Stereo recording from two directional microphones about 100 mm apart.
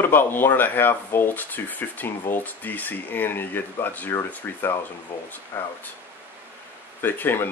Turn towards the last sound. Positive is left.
turn(degrees=20)  # may be behind; listen again after turning